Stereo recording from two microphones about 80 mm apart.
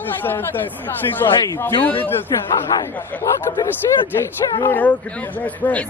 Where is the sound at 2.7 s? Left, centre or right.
Left.